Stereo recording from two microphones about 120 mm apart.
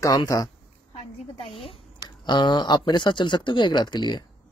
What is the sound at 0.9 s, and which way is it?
Speech, 55° left (ahead or behind).